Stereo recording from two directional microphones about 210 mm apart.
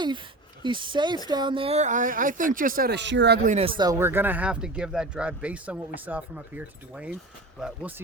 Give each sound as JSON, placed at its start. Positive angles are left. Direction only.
{"t": 0.6, "sound": "speech", "side_deg": -25}
{"t": 3.8, "sound": "speech", "side_deg": -15}